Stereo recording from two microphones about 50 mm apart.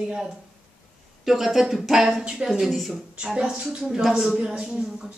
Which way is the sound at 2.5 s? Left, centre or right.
Centre.